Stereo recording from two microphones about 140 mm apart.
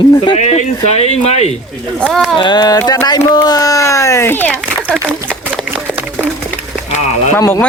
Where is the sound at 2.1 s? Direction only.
Centre (ahead or behind).